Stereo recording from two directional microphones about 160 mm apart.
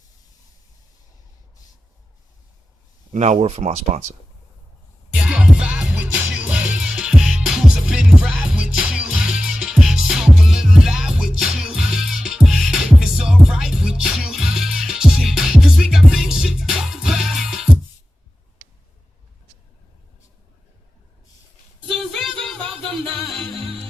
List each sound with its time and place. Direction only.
3.1 s speech: 45° right (ahead or behind)
5.1 s music: 5° right (ahead or behind)
21.8 s music: centre (ahead or behind)